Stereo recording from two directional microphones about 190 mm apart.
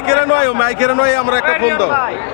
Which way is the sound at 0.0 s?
40° right (ahead or behind).